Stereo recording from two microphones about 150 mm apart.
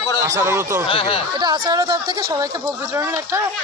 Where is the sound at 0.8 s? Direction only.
40° left (ahead or behind).